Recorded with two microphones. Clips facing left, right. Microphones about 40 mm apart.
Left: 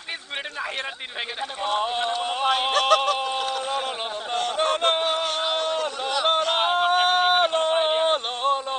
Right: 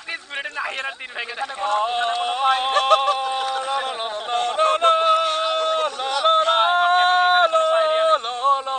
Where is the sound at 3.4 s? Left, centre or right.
Right.